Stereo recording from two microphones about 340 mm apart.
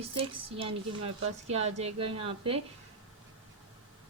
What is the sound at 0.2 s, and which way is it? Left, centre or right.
A woman's voice, centre.